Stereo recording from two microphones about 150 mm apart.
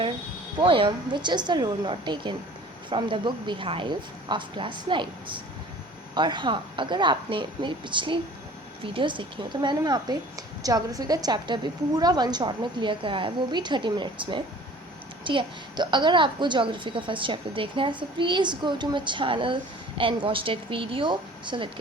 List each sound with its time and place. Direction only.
0.6 s speech: 35° right (ahead or behind)